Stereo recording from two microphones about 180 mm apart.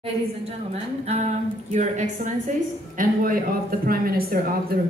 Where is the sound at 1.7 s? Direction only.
40° right (ahead or behind).